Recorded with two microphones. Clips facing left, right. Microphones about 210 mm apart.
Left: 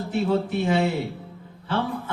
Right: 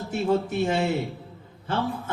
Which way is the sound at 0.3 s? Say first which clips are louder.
Right 1 dB; 45° right (ahead or behind).